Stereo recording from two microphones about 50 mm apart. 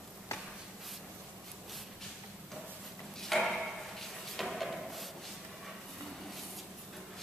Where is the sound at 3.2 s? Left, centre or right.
Centre.